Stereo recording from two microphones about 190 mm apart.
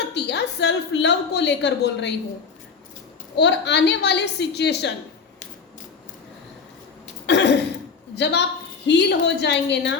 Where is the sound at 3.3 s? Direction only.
65° left (ahead or behind).